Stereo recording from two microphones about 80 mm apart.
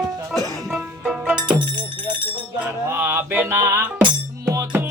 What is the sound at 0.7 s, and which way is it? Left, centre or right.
Music, centre.